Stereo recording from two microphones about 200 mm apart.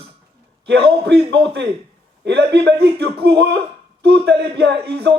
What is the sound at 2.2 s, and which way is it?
Speech, 55° right (ahead or behind).